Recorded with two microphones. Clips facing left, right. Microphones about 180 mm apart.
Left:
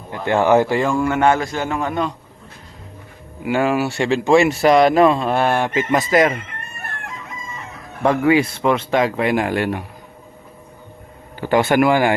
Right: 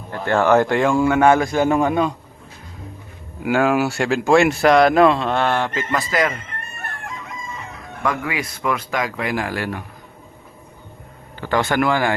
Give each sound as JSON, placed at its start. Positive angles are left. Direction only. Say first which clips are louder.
{"t": 0.1, "sound": "speech", "louder": "left 1 dB", "side_deg": 15}
{"t": 0.9, "sound": "a man's voice", "louder": "right 3 dB", "side_deg": -10}
{"t": 3.5, "sound": "speech", "louder": "right 1 dB", "side_deg": 0}
{"t": 8.0, "sound": "speech", "louder": "left 9 dB", "side_deg": 30}
{"t": 11.3, "sound": "speech", "louder": "left 4 dB", "side_deg": 15}